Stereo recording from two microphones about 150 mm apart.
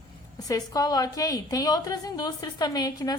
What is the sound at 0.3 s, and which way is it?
A woman's voice, 25° left (ahead or behind).